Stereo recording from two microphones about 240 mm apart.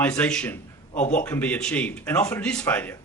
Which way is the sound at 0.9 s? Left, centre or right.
Left.